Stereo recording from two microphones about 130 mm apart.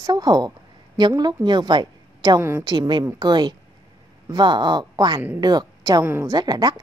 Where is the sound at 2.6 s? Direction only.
35° right (ahead or behind).